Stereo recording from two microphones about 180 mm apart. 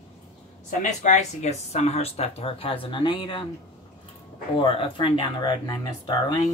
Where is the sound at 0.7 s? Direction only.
40° left (ahead or behind); by 3.4 s 25° left (ahead or behind).